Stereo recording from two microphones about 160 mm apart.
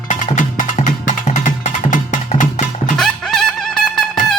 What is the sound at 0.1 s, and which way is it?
Music, 50° left (ahead or behind).